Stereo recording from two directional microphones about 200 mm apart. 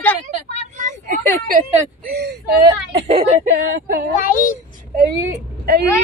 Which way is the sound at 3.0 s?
30° right (ahead or behind).